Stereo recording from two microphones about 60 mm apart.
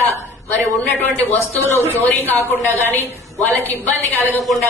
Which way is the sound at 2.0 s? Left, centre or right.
Left.